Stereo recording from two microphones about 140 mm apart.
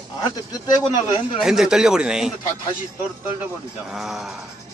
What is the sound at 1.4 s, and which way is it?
Speech, 5° right (ahead or behind).